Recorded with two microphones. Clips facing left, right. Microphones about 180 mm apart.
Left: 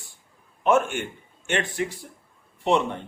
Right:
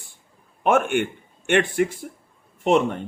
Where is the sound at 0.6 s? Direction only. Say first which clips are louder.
Right 2 dB; 60° right (ahead or behind).